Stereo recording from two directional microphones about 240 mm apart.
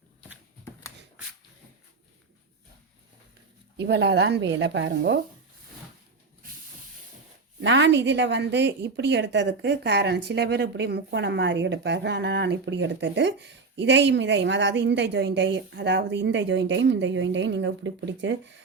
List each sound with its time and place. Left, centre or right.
0.6 s a sound: centre
3.8 s a woman's voice: right
7.6 s a woman's voice: right